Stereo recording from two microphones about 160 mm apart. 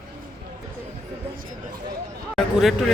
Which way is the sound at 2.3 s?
Centre (ahead or behind).